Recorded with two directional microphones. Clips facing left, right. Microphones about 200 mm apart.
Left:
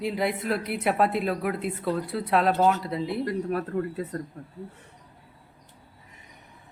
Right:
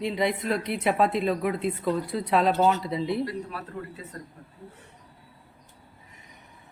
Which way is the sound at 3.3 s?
50° left (ahead or behind).